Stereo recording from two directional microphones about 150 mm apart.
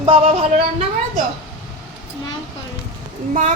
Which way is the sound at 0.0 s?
45° right (ahead or behind).